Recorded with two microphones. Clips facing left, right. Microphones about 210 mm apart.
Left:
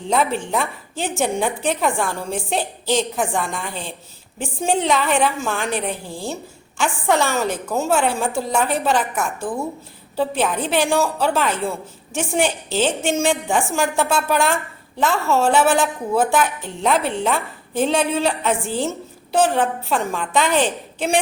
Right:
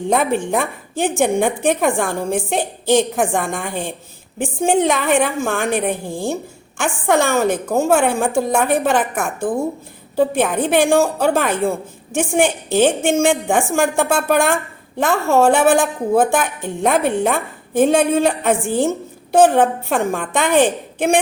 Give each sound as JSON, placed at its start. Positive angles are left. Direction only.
{"t": 0.0, "sound": "a woman's voice", "side_deg": -50}